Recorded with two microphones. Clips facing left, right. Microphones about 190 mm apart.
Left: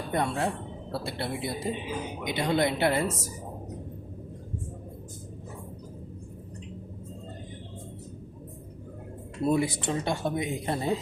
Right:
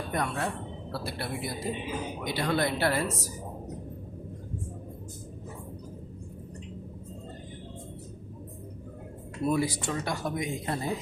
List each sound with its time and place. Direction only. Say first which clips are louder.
0.1 s speech: left 4 dB; 25° left (ahead or behind)
9.4 s speech: left 2 dB; 25° left (ahead or behind)